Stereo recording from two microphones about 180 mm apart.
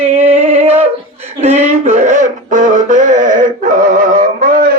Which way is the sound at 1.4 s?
40° right (ahead or behind).